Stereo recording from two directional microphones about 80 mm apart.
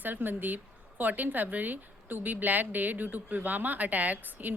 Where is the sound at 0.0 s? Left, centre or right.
Right.